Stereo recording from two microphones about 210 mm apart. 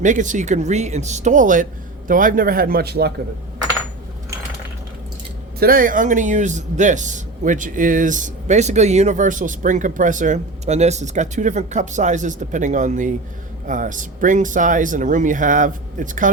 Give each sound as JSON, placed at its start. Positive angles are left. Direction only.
{"t": 0.0, "sound": "a man's voice", "side_deg": -35}
{"t": 5.5, "sound": "a man's voice", "side_deg": -45}